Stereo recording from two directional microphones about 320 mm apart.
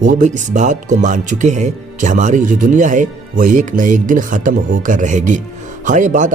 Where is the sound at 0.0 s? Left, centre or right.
Right.